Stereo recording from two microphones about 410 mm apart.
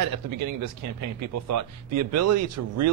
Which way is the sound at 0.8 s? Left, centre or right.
Right.